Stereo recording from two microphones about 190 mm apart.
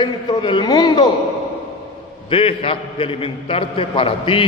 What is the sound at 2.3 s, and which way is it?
A man's voice, 30° left (ahead or behind).